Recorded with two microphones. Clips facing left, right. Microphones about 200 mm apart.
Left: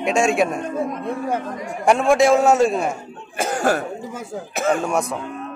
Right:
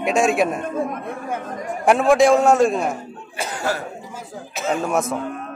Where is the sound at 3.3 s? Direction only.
50° left (ahead or behind).